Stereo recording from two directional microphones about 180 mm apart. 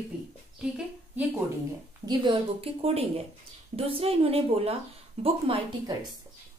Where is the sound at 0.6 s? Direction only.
5° right (ahead or behind).